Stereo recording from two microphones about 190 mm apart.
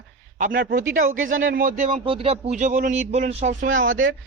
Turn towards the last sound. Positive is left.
turn(degrees=-40)  # may be behind; listen again after turning